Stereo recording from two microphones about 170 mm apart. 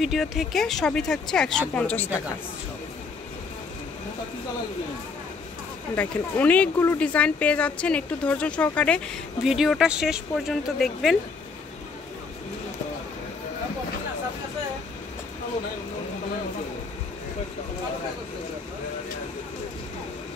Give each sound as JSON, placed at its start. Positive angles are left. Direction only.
{"t": 0.0, "sound": "speech", "side_deg": 0}
{"t": 5.9, "sound": "speech", "side_deg": 10}